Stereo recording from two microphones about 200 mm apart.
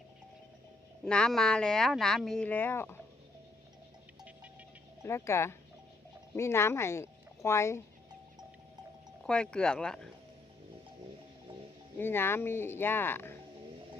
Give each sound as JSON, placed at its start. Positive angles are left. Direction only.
{"t": 1.0, "sound": "speech", "side_deg": 5}
{"t": 5.0, "sound": "speech", "side_deg": 15}
{"t": 9.2, "sound": "speech", "side_deg": 5}
{"t": 11.9, "sound": "speech", "side_deg": 10}